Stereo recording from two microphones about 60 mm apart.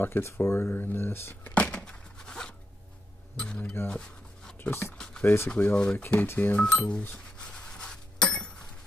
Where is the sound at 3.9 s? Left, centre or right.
Centre.